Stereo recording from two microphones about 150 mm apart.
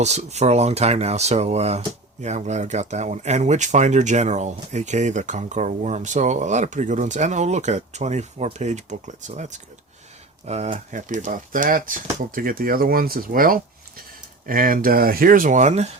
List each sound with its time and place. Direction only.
0.0 s speech: 50° right (ahead or behind)